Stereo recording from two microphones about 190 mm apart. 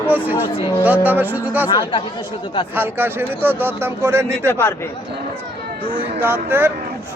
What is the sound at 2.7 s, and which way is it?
Speech, 10° right (ahead or behind).